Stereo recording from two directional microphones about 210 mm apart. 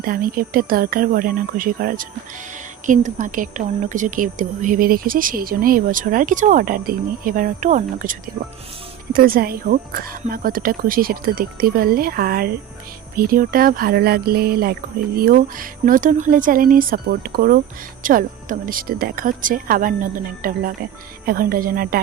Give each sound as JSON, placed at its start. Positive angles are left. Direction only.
{"t": 0.0, "sound": "a woman's voice", "side_deg": -40}
{"t": 9.1, "sound": "a woman's voice", "side_deg": -45}